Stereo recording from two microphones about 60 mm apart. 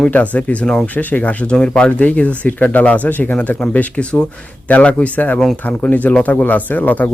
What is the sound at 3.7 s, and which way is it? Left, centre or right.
Speech, centre.